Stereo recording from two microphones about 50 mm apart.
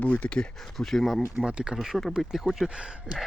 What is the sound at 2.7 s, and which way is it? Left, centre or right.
Speech, centre.